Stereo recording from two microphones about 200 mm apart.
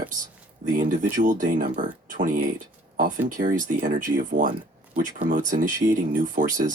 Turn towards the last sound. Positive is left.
turn(degrees=-40)  # may be behind; listen again after turning